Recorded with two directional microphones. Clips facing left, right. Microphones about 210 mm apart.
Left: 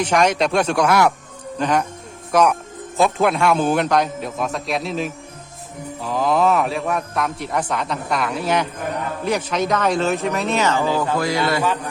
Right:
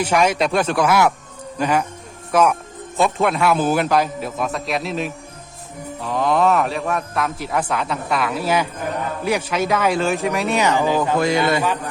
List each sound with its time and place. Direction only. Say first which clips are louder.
0.0 s a man's voice: even; 5° right (ahead or behind)